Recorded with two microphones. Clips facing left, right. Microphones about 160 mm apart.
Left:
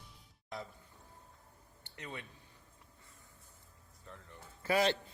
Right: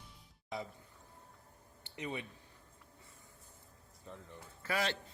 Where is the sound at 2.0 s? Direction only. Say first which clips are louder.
Right 5 dB; 15° right (ahead or behind).